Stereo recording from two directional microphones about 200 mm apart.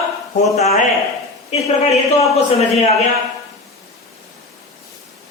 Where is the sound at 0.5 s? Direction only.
30° left (ahead or behind).